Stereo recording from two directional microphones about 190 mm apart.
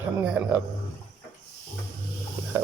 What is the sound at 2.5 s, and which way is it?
Speech, 15° right (ahead or behind).